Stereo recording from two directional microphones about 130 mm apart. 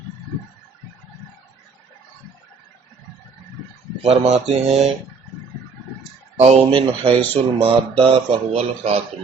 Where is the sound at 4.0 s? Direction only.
55° right (ahead or behind).